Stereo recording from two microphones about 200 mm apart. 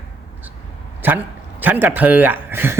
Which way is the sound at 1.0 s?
10° right (ahead or behind).